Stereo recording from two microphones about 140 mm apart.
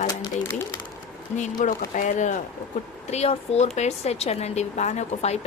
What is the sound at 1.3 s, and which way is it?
Speech, 60° left (ahead or behind).